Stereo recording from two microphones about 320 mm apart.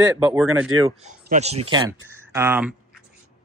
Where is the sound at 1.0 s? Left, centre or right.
Right; by 3.0 s centre.